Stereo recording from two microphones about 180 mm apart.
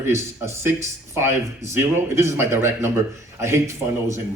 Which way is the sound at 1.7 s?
15° right (ahead or behind).